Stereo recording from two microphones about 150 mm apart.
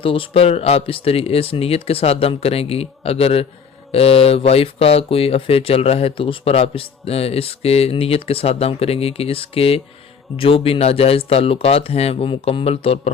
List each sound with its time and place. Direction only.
0.0 s speech: 35° left (ahead or behind)